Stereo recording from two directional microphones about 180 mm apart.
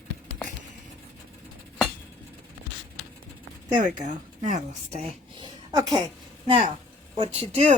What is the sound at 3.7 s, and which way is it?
Speech, 45° right (ahead or behind).